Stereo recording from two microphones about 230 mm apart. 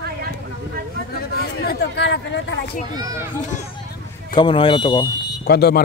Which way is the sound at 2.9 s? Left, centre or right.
Centre.